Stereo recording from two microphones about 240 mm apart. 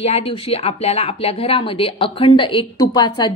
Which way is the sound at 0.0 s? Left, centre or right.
Left.